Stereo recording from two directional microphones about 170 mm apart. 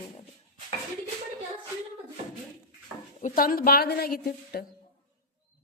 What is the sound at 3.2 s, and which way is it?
A woman's voice, 55° left (ahead or behind).